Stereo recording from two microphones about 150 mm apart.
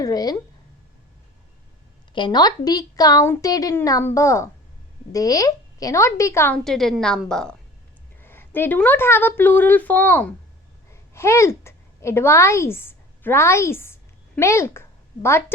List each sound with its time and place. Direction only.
0.0 s a woman's voice: 25° left (ahead or behind)
2.1 s a woman's voice: 30° left (ahead or behind)
6.7 s a woman's voice: centre (ahead or behind)
8.2 s a woman's voice: 15° left (ahead or behind)